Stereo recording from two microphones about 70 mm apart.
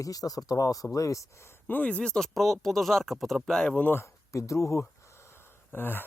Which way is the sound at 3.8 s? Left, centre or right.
Left.